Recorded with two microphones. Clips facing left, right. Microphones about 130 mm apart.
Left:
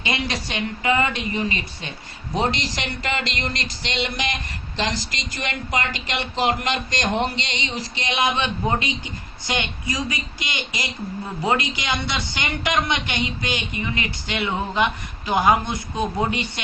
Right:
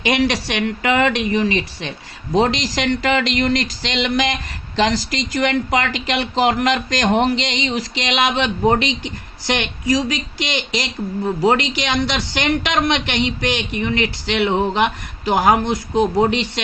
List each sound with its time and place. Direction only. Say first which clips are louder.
0.0 s a man's voice: right 8 dB; 80° right